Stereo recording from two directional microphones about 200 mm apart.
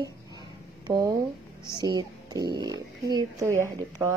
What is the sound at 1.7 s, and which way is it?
Speech, 20° right (ahead or behind).